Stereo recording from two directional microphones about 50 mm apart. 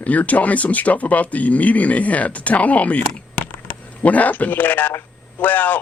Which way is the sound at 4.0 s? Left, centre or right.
Left.